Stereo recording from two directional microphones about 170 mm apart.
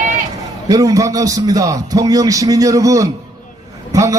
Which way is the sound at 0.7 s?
20° right (ahead or behind).